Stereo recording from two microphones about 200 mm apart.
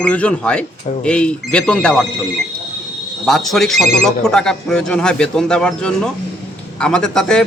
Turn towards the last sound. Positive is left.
turn(degrees=5)  # may be behind; listen again after turning